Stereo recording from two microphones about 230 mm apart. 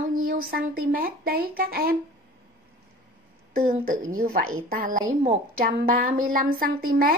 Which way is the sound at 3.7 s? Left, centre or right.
Right.